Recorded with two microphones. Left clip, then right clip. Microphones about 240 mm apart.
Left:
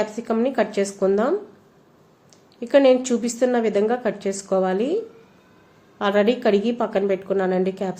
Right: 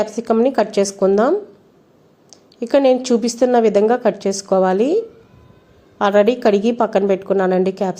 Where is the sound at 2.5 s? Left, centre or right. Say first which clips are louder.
Right 2 dB; right.